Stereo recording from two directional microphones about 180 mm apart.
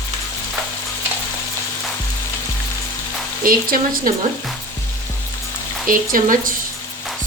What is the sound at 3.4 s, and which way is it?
Speech, 50° right (ahead or behind).